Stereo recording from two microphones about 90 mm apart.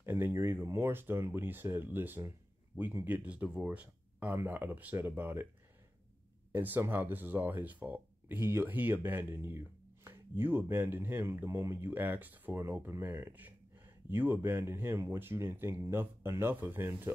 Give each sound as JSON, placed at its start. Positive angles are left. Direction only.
{"t": 0.0, "sound": "speech", "side_deg": -25}
{"t": 3.3, "sound": "speech", "side_deg": -15}
{"t": 6.5, "sound": "speech", "side_deg": -25}